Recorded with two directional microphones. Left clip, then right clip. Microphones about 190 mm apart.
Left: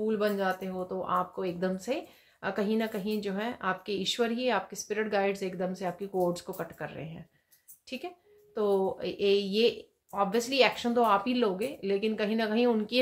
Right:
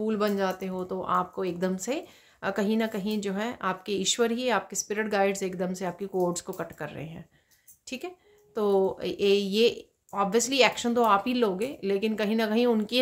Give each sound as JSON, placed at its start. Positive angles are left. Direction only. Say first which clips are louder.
{"t": 0.0, "sound": "speech", "louder": "right 2 dB", "side_deg": -35}